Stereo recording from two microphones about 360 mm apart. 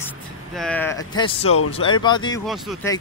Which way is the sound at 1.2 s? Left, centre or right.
Centre.